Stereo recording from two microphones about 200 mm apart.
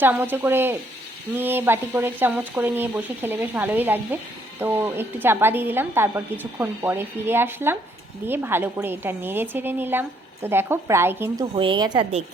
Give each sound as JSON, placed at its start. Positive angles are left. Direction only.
{"t": 0.0, "sound": "speech", "side_deg": -10}
{"t": 11.5, "sound": "a woman's voice", "side_deg": -25}